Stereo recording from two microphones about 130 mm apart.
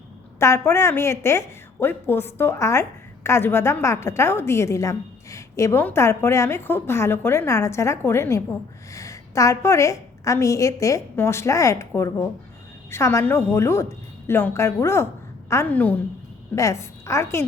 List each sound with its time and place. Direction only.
0.3 s a woman's voice: 20° left (ahead or behind)
16.6 s a woman's voice: 25° left (ahead or behind)